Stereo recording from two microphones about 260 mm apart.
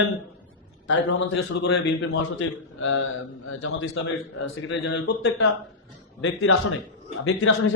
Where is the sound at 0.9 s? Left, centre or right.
Left.